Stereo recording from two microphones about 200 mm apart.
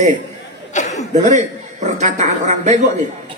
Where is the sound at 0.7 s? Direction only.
35° left (ahead or behind).